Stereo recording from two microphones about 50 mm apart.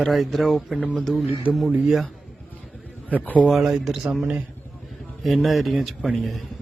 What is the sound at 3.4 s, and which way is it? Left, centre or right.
A man's voice, centre.